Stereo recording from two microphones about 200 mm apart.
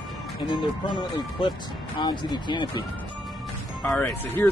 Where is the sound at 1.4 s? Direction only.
25° left (ahead or behind).